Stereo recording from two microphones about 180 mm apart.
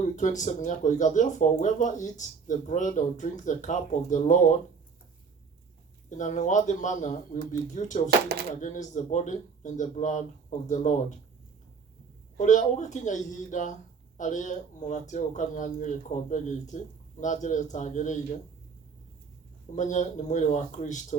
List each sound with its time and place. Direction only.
0.2 s speech: 45° left (ahead or behind)
6.1 s speech: 45° left (ahead or behind)
12.4 s speech: 40° left (ahead or behind)
19.7 s speech: 40° left (ahead or behind)